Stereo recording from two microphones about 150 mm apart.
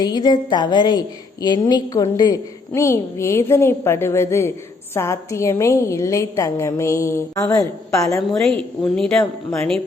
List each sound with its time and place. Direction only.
0.0 s a woman's voice: 30° left (ahead or behind)
8.3 s speech: centre (ahead or behind)